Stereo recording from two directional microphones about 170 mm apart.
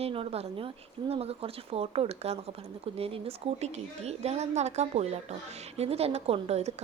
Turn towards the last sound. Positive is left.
turn(degrees=-40)  # may be behind; listen again after turning